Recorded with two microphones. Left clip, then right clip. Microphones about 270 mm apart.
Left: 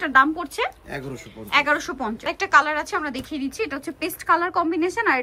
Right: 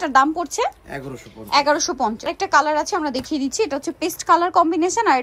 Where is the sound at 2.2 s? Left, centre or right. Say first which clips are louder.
Left 2 dB; centre.